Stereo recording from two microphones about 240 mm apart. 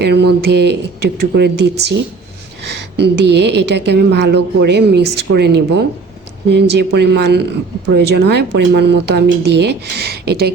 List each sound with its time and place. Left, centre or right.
0.0 s speech: right
3.0 s speech: right